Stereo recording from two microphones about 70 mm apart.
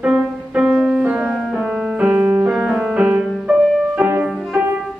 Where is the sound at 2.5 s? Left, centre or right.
Centre.